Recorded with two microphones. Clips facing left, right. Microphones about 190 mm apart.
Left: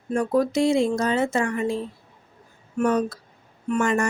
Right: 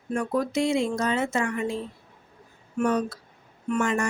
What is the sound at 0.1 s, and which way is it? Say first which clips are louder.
Speech: left 4 dB; 35° left (ahead or behind).